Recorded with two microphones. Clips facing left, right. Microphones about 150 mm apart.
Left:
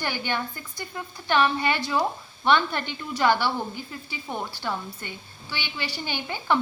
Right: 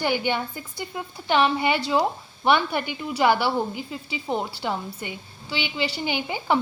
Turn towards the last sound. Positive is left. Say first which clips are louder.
# right 2 dB
turn(degrees=-15)  # may be behind; listen again after turning